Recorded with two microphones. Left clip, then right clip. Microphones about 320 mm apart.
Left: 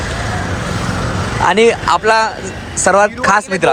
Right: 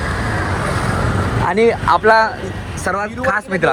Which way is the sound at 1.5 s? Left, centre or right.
Centre.